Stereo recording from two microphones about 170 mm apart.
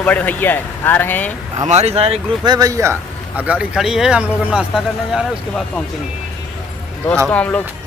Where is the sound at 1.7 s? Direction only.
40° right (ahead or behind).